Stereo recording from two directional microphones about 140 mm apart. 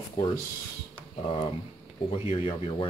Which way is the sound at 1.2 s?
45° left (ahead or behind).